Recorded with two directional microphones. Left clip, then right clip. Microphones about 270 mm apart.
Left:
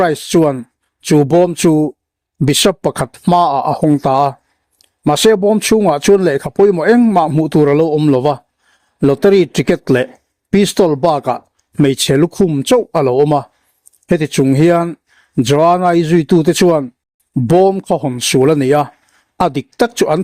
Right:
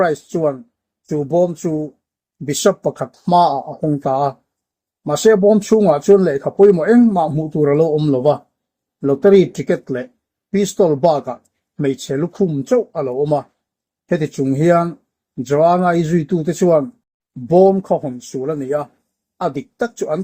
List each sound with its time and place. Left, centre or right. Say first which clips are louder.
0.0 s speech: left 4 dB; left
2.8 s speech: left 4 dB; left